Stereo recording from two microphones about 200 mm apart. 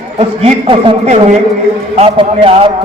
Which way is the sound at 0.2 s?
30° right (ahead or behind).